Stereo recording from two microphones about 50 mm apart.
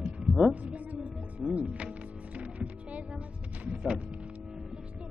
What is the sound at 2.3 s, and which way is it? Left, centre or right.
Music, right.